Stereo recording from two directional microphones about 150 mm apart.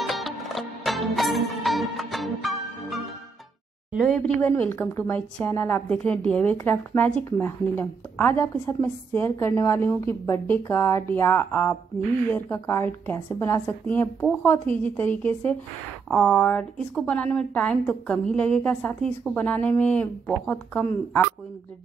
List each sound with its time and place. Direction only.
0.0 s music: centre (ahead or behind)
4.1 s a woman's voice: 10° left (ahead or behind)